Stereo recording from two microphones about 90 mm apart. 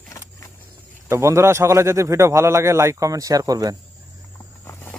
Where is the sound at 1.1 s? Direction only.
30° right (ahead or behind).